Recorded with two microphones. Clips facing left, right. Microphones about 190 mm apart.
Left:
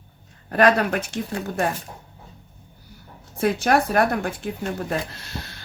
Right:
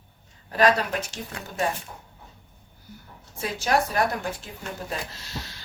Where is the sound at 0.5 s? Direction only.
55° left (ahead or behind).